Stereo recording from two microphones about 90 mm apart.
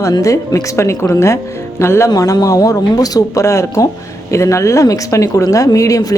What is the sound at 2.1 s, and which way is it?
Speech, 45° left (ahead or behind).